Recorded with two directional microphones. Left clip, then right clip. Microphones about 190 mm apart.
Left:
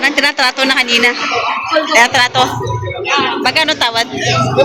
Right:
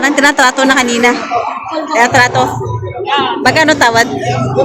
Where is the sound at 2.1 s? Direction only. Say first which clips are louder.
Right 2 dB; 15° right (ahead or behind).